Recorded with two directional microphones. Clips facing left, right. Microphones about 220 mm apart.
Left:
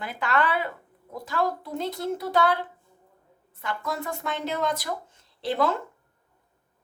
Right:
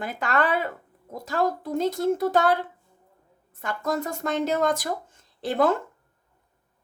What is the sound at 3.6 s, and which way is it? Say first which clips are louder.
A woman's voice: right 4 dB; 45° right (ahead or behind).